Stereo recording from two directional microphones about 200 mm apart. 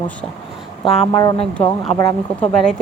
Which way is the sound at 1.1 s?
20° left (ahead or behind).